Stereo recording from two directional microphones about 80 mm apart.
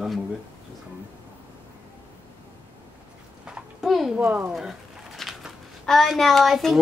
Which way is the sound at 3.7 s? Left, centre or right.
Centre.